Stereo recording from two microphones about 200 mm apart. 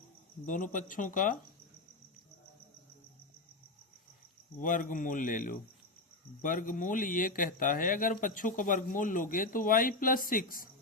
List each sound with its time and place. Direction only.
0.4 s speech: 40° left (ahead or behind)
4.6 s speech: 45° left (ahead or behind)